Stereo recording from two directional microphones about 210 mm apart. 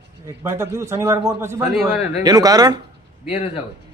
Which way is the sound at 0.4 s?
10° right (ahead or behind).